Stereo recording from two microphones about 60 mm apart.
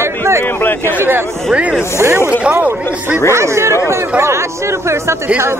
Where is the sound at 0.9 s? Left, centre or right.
Right.